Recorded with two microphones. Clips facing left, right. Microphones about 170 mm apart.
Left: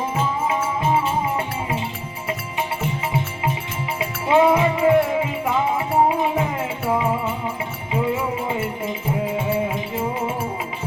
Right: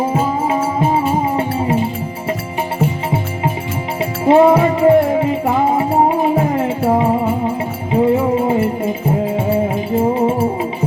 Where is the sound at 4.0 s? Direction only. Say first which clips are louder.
Right 7 dB; 50° right (ahead or behind).